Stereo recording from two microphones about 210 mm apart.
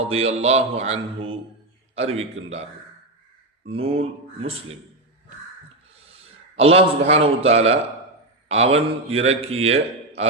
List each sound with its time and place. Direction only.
0.0 s speech: 30° right (ahead or behind)
3.7 s speech: 25° right (ahead or behind)
6.6 s speech: 30° right (ahead or behind)